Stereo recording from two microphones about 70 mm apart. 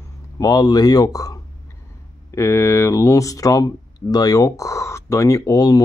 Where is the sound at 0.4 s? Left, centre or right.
Left.